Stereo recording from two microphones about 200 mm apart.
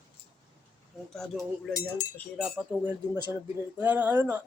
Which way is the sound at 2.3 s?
Centre (ahead or behind).